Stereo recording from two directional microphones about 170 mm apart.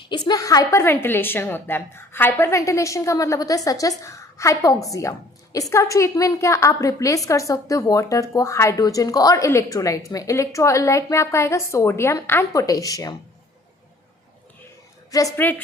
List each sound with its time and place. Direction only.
0.1 s a woman's voice: 25° left (ahead or behind)
15.1 s a woman's voice: 15° left (ahead or behind)